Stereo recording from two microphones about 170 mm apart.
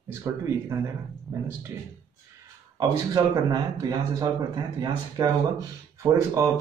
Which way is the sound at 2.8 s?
20° right (ahead or behind).